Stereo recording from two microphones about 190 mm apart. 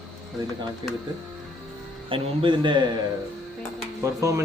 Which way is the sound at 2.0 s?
25° right (ahead or behind).